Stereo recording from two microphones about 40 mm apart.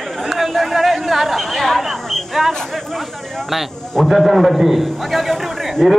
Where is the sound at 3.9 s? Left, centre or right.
Centre.